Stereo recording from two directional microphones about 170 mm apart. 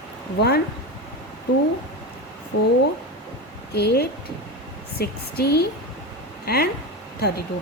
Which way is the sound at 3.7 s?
70° left (ahead or behind).